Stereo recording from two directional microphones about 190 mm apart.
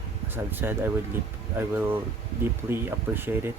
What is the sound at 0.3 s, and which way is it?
Speech, 10° right (ahead or behind).